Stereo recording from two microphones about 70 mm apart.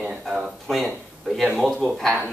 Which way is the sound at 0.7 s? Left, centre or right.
Centre.